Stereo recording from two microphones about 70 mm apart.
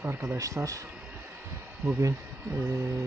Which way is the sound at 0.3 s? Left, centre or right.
Right.